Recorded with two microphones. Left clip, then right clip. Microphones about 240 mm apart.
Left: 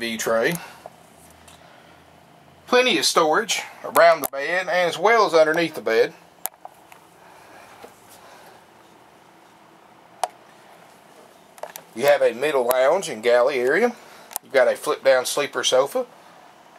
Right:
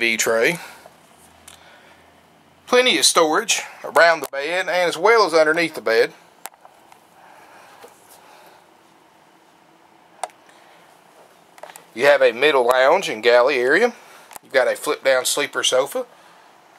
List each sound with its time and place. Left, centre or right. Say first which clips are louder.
0.0 s speech: right 4 dB; centre
2.6 s speech: right 3 dB; centre
11.9 s speech: right 3 dB; centre